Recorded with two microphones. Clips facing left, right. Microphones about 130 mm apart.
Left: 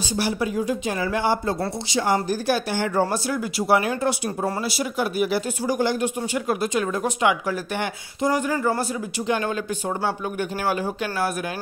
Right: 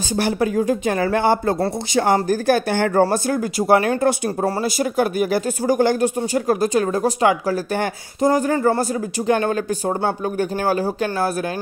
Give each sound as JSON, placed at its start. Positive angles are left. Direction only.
{"t": 0.2, "sound": "speech", "side_deg": -50}